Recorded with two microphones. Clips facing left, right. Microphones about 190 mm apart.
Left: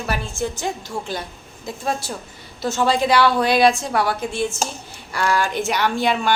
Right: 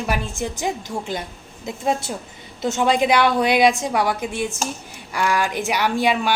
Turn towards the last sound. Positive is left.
turn(degrees=-10)  # may be behind; listen again after turning